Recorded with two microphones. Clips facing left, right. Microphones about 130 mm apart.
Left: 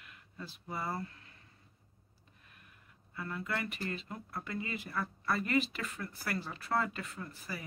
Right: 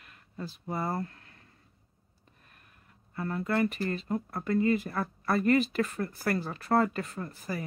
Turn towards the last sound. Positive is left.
turn(degrees=-45)  # may be behind; listen again after turning